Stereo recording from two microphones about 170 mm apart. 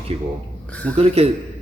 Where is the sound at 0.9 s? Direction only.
35° right (ahead or behind).